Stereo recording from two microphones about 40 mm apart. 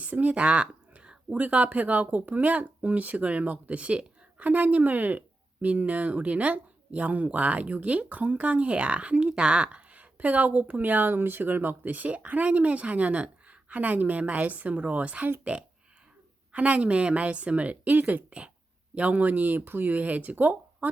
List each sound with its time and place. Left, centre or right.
0.0 s speech: right
16.5 s speech: right
17.9 s speech: right
18.3 s speech: right
18.9 s speech: right
20.0 s speech: right